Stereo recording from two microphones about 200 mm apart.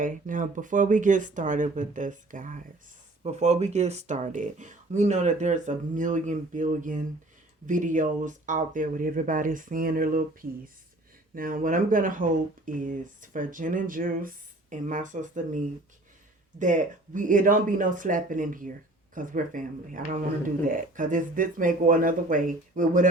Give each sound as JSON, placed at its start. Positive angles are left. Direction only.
{"t": 0.0, "sound": "speech", "side_deg": -40}
{"t": 11.3, "sound": "speech", "side_deg": -45}